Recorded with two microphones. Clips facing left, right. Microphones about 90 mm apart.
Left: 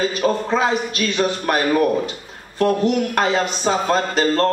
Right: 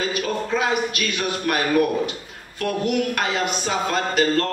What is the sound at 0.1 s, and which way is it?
Speech, 35° left (ahead or behind).